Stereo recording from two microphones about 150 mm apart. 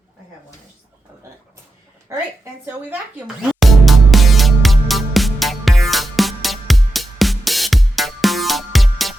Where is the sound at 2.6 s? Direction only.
15° right (ahead or behind).